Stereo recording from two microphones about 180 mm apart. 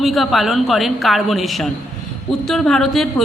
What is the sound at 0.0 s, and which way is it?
A woman's voice, centre (ahead or behind).